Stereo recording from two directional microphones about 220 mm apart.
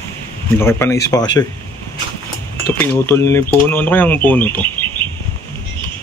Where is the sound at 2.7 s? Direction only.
10° left (ahead or behind).